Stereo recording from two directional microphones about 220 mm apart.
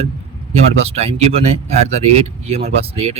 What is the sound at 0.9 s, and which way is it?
Speech, 30° right (ahead or behind).